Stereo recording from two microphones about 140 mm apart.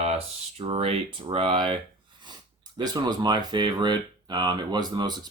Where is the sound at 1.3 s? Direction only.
40° right (ahead or behind).